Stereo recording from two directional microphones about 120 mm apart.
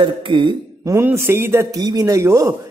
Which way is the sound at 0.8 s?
25° right (ahead or behind).